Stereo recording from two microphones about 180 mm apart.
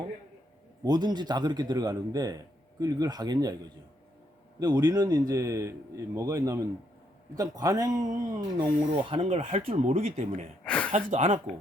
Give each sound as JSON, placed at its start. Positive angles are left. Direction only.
{"t": 0.9, "sound": "a man's voice", "side_deg": -25}
{"t": 4.8, "sound": "speech", "side_deg": -20}
{"t": 10.6, "sound": "a sound", "side_deg": 5}
{"t": 10.9, "sound": "speech", "side_deg": -45}